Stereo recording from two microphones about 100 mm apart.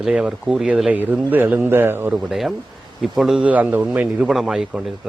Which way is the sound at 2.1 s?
5° right (ahead or behind).